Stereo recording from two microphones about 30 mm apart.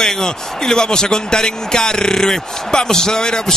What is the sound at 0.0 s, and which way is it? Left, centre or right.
Speech, left.